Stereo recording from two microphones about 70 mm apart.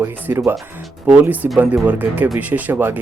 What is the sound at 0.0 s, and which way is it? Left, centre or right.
Speech, right.